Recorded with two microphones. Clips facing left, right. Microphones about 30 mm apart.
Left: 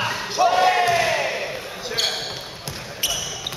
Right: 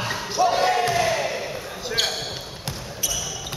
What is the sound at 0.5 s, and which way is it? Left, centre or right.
Crowd, left.